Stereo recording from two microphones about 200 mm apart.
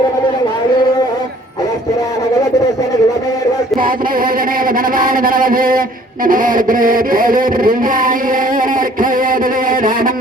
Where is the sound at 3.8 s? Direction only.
45° right (ahead or behind).